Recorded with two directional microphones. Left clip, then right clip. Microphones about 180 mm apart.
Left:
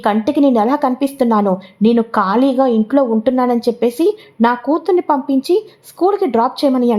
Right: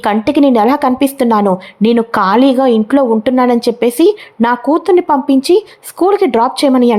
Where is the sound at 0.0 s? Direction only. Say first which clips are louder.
Right 3 dB; 20° right (ahead or behind).